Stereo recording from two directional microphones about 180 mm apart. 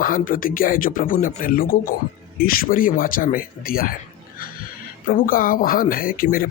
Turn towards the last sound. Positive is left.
turn(degrees=50)  # may be behind; listen again after turning